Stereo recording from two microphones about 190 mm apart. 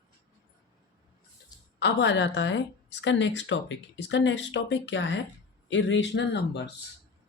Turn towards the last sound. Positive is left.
turn(degrees=65)  # may be behind; listen again after turning